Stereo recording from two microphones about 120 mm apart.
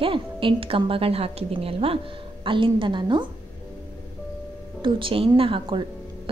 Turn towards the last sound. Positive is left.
turn(degrees=-45)  # may be behind; listen again after turning